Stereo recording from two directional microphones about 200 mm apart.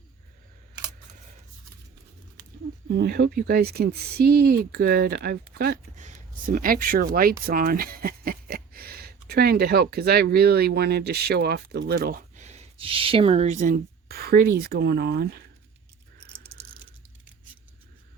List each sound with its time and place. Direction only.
2.9 s speech: 55° right (ahead or behind)